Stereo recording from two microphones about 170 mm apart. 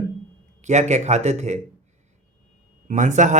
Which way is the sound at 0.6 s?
45° right (ahead or behind).